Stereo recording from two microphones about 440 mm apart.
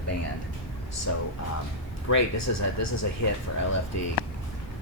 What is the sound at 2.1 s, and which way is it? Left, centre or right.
Speech, left.